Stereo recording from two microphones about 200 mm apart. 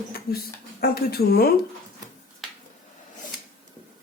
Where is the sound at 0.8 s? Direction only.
50° left (ahead or behind).